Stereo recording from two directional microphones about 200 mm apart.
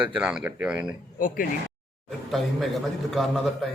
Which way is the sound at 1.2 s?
45° left (ahead or behind).